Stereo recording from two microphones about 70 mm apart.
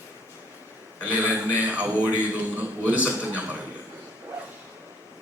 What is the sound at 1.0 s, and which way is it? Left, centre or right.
A man's voice, right.